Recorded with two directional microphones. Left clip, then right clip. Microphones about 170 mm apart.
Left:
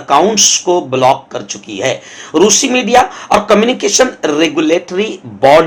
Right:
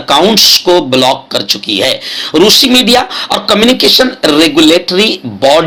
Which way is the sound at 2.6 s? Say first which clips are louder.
Right 2 dB; 35° right (ahead or behind).